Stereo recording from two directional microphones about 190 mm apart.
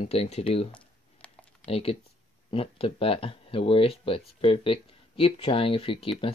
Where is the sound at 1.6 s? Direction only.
30° left (ahead or behind).